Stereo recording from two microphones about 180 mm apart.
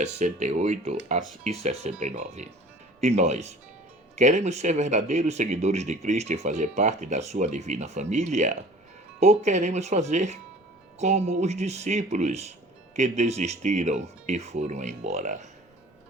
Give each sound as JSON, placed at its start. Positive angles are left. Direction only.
{"t": 0.0, "sound": "speech", "side_deg": -40}